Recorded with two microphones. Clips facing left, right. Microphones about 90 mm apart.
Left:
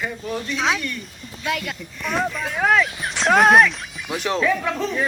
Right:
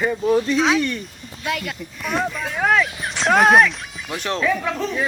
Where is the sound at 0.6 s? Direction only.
Centre (ahead or behind).